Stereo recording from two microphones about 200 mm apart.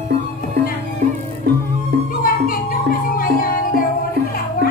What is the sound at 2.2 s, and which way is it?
Music, 45° left (ahead or behind).